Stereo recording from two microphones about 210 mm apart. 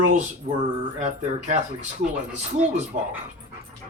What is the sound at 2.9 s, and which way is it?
Speech, 45° right (ahead or behind).